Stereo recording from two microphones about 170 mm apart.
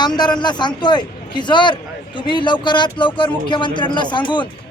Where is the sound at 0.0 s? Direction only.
25° left (ahead or behind).